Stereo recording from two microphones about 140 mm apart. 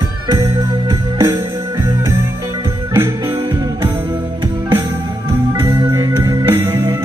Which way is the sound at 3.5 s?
25° right (ahead or behind).